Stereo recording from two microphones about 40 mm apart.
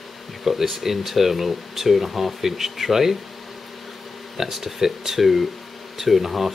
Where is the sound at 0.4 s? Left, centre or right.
Centre.